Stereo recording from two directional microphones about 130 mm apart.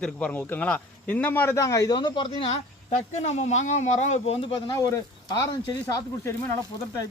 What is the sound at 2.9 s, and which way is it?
Speech, 60° left (ahead or behind).